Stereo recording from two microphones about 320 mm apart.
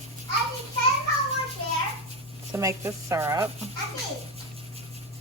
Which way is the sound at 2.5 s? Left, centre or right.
Centre.